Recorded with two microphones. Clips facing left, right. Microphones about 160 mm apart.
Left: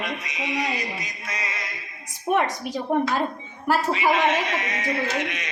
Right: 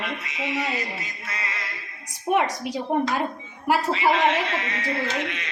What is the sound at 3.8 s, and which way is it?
Speech, 15° left (ahead or behind).